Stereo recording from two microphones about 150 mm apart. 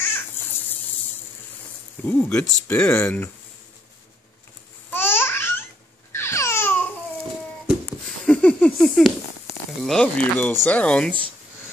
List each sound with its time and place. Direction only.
2.0 s speech: 10° left (ahead or behind)
4.9 s babbling: 15° left (ahead or behind)
8.3 s a sound: 10° left (ahead or behind)
9.8 s speech: 5° left (ahead or behind)